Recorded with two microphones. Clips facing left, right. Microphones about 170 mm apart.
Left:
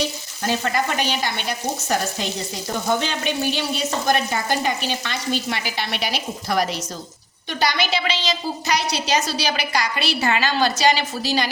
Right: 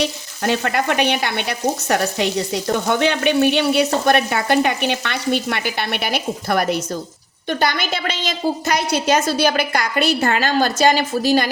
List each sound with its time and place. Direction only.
0.0 s frying: 65° right (ahead or behind)
7.4 s a woman's voice: 50° right (ahead or behind)